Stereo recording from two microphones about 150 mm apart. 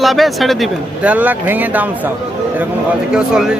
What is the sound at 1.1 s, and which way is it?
Speech, 10° right (ahead or behind).